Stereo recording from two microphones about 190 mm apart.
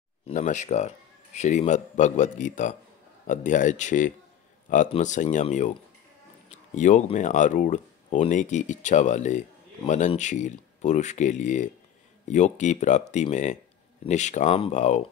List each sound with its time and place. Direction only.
0.3 s speech: 40° left (ahead or behind)
6.7 s speech: 40° left (ahead or behind)